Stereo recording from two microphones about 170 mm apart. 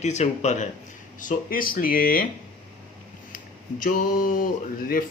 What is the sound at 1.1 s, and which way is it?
Speech, 55° left (ahead or behind).